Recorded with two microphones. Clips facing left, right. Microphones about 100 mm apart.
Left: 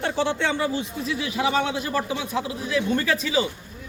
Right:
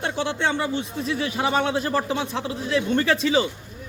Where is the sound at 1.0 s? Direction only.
35° right (ahead or behind).